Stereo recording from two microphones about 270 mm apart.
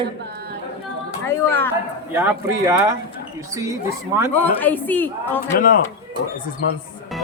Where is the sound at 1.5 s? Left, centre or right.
Centre.